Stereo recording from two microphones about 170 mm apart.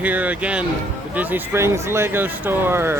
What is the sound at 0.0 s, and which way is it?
Speech, 10° right (ahead or behind).